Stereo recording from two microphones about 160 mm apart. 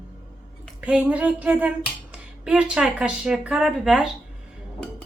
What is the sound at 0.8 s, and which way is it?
Speech, 10° right (ahead or behind).